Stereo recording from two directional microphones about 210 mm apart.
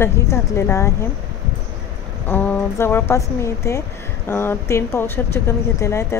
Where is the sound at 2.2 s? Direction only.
10° left (ahead or behind).